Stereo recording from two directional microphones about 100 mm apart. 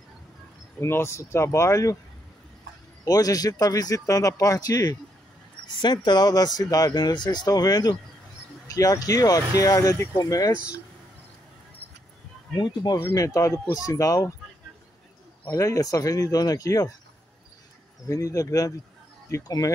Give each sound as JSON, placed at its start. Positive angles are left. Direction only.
{"t": 0.7, "sound": "speech", "side_deg": 25}
{"t": 3.1, "sound": "speech", "side_deg": 40}
{"t": 12.5, "sound": "speech", "side_deg": 50}
{"t": 13.0, "sound": "speech", "side_deg": 35}
{"t": 15.5, "sound": "speech", "side_deg": 30}
{"t": 18.0, "sound": "speech", "side_deg": 30}